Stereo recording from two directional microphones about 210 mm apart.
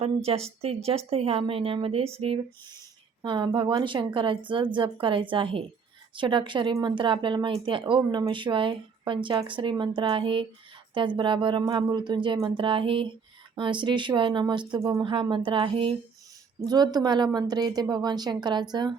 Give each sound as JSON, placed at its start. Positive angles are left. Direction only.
{"t": 0.0, "sound": "speech", "side_deg": -30}